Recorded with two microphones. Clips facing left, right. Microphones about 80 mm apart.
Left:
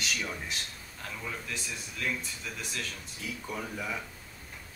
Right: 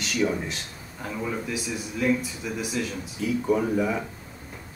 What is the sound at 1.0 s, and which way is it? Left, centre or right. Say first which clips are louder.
A man's voice: right 9 dB; centre.